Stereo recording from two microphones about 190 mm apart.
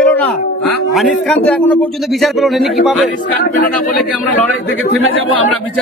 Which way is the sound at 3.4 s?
50° left (ahead or behind).